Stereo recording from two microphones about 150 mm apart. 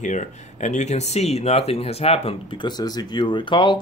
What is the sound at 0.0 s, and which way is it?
Speech, 55° left (ahead or behind).